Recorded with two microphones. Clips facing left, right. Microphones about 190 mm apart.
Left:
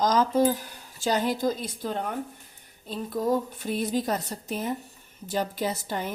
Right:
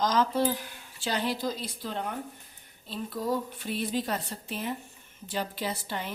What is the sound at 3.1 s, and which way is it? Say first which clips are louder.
A woman's voice: left 5 dB; 45° left (ahead or behind).